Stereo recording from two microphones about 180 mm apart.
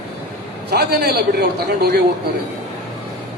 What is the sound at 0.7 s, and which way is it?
A man's voice, 65° right (ahead or behind).